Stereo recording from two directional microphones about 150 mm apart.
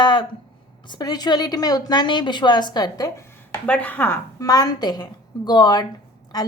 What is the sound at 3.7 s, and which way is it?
A woman's voice, 10° left (ahead or behind).